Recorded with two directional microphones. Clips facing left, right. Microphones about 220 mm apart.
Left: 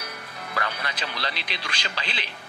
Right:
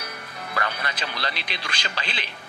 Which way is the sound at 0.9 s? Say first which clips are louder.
Right 1 dB; 50° right (ahead or behind).